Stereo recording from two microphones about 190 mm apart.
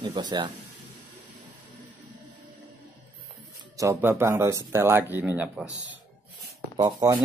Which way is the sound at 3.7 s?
15° right (ahead or behind).